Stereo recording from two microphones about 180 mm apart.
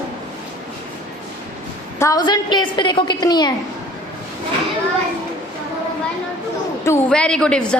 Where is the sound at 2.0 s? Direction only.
20° left (ahead or behind).